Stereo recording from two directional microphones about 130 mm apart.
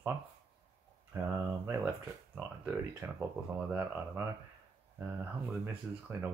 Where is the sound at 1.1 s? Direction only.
20° right (ahead or behind).